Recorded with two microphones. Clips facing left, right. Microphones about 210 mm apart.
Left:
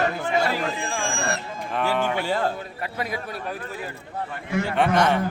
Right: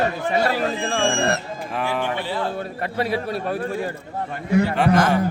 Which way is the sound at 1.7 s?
10° right (ahead or behind).